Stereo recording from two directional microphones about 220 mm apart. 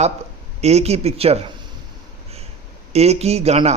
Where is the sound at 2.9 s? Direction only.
30° right (ahead or behind).